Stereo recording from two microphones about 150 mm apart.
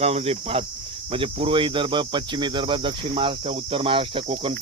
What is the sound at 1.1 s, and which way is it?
Cricket, 35° right (ahead or behind).